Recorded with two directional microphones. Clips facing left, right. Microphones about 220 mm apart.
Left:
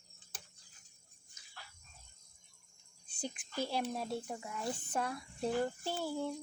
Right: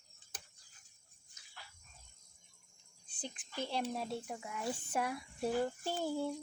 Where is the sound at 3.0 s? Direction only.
10° left (ahead or behind).